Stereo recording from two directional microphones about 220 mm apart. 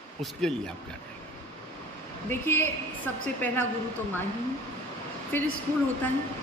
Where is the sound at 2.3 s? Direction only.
10° left (ahead or behind).